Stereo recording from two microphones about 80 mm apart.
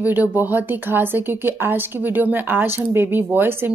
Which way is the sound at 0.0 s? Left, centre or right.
Right.